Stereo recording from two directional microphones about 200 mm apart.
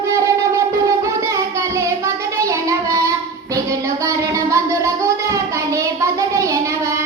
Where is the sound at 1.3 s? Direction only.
15° right (ahead or behind).